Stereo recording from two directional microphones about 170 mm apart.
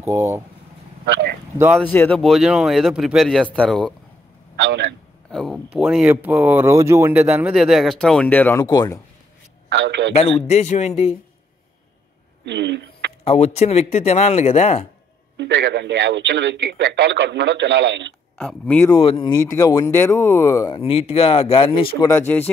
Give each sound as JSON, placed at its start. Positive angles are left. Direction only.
{"t": 0.0, "sound": "speech", "side_deg": -15}
{"t": 1.8, "sound": "speech", "side_deg": 10}
{"t": 4.6, "sound": "a man's voice", "side_deg": -90}
{"t": 5.3, "sound": "speech", "side_deg": 0}
{"t": 9.7, "sound": "a man's voice", "side_deg": -85}
{"t": 10.1, "sound": "speech", "side_deg": 40}
{"t": 12.4, "sound": "speech", "side_deg": -90}
{"t": 13.2, "sound": "speech", "side_deg": 40}
{"t": 15.3, "sound": "speech", "side_deg": -90}
{"t": 18.4, "sound": "speech", "side_deg": 5}
{"t": 18.9, "sound": "speech", "side_deg": 30}
{"t": 19.3, "sound": "speech", "side_deg": 15}
{"t": 20.7, "sound": "speech", "side_deg": 35}
{"t": 22.0, "sound": "speech", "side_deg": 15}